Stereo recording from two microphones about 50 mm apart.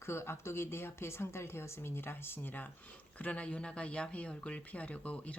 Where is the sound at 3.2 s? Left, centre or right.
Left.